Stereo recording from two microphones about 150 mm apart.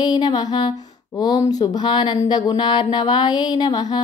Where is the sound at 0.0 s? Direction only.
25° left (ahead or behind).